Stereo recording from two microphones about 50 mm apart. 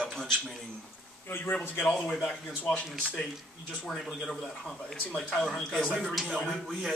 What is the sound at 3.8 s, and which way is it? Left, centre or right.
A man's voice, centre.